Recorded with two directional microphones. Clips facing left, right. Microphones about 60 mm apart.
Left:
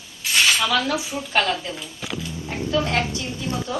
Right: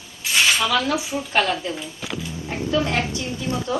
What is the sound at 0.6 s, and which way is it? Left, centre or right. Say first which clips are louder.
Speech: right 1 dB; centre.